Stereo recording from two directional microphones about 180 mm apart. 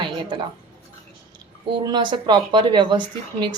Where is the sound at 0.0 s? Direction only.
25° right (ahead or behind).